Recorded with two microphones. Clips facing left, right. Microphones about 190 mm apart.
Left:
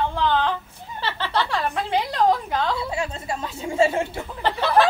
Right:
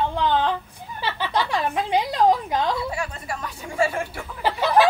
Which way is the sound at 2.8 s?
25° left (ahead or behind).